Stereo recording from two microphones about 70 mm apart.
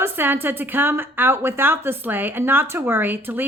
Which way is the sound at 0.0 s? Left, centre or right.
Right.